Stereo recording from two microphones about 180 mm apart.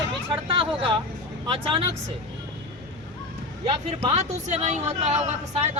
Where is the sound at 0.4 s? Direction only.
30° right (ahead or behind).